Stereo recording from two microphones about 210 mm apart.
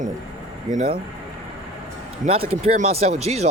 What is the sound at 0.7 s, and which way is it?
Speech, 40° right (ahead or behind).